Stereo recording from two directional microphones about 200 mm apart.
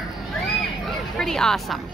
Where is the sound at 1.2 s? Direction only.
Centre (ahead or behind).